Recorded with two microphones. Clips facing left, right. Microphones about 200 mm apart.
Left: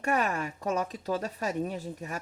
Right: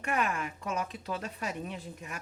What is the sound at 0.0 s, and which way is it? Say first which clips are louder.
Speech: left 3 dB; 40° left (ahead or behind).